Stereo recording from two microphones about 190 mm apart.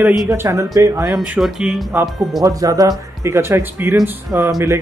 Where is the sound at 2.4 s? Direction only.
20° right (ahead or behind).